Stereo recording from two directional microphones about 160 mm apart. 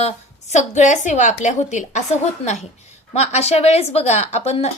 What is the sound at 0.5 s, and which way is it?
A woman's voice, 50° left (ahead or behind).